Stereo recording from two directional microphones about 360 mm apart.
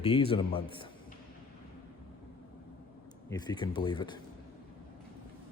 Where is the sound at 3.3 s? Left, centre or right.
Centre.